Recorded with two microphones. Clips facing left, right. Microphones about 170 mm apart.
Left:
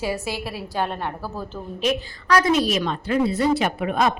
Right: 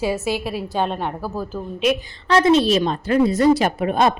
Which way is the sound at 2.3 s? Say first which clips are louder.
Right 4 dB; 25° right (ahead or behind).